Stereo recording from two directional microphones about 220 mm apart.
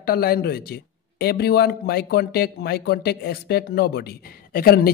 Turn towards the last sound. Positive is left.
turn(degrees=40)  # may be behind; listen again after turning